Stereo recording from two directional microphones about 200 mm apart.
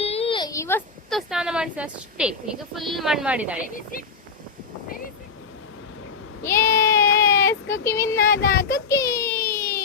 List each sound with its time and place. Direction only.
0.0 s a sound: 30° left (ahead or behind); by 0.8 s 15° left (ahead or behind)
1.1 s a woman's voice: 5° right (ahead or behind)
6.4 s child singing: 15° left (ahead or behind)
7.9 s speech: 15° left (ahead or behind)
8.2 s speech: 45° left (ahead or behind)
8.7 s a sound: 15° left (ahead or behind)